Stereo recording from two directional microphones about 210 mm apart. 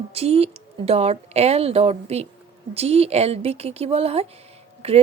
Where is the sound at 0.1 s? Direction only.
30° right (ahead or behind).